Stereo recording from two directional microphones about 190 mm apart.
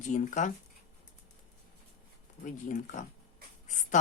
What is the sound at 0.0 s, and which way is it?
Speech, 40° left (ahead or behind).